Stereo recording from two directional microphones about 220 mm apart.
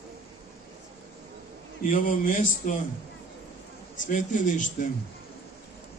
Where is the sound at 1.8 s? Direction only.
35° left (ahead or behind).